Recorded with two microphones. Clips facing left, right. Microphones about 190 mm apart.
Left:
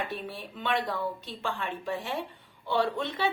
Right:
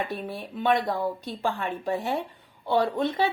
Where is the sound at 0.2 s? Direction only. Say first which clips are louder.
Right 6 dB; 45° right (ahead or behind).